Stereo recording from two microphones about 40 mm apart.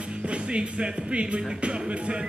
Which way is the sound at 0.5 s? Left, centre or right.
Right.